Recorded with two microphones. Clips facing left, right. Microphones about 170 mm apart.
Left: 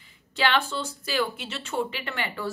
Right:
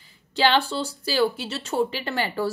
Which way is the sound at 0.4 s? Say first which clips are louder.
Right 4 dB; 30° right (ahead or behind).